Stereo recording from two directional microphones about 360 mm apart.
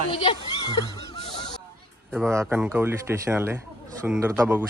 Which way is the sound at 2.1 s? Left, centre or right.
Centre.